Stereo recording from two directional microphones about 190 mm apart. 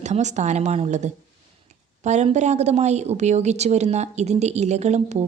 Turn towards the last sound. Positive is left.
turn(degrees=-35)  # may be behind; listen again after turning